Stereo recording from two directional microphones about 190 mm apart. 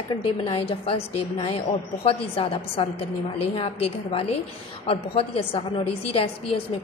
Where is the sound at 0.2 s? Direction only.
30° left (ahead or behind).